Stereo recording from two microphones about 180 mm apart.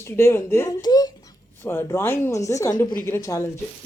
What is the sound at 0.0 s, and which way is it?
Speech, 15° left (ahead or behind).